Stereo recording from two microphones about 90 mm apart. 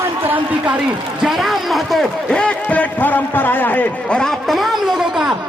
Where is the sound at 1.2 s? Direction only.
5° right (ahead or behind).